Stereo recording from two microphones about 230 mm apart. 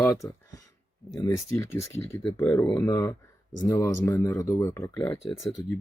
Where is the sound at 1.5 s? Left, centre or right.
Centre.